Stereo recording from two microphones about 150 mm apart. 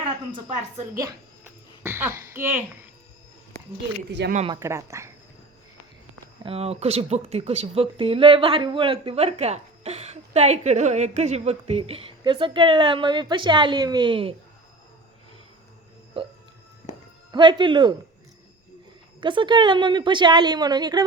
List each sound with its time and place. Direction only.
1.8 s speech: 15° right (ahead or behind)
4.6 s speech: 20° right (ahead or behind)
6.4 s speech: 40° right (ahead or behind)
17.3 s speech: 30° right (ahead or behind)
19.2 s speech: 30° right (ahead or behind)